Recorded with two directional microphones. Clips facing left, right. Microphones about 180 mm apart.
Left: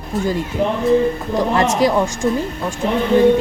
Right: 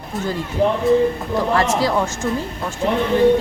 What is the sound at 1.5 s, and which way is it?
Speech, 20° left (ahead or behind).